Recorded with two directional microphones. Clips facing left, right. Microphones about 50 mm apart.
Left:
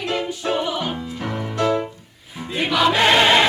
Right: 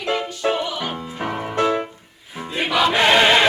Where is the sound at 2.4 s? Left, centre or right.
Centre.